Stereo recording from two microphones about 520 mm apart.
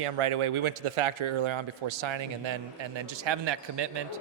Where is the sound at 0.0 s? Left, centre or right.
Right.